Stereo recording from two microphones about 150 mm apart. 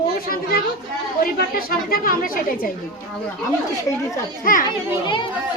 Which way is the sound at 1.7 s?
75° left (ahead or behind).